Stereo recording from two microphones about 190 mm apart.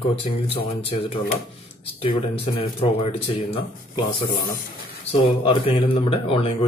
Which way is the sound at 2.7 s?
30° left (ahead or behind).